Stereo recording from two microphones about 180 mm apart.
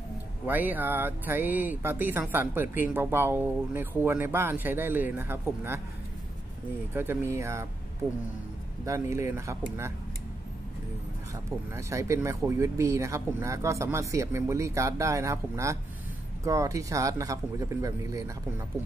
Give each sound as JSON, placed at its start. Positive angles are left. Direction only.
{"t": 0.5, "sound": "speech", "side_deg": -10}
{"t": 6.9, "sound": "speech", "side_deg": -10}
{"t": 8.8, "sound": "speech", "side_deg": -15}
{"t": 11.7, "sound": "speech", "side_deg": -15}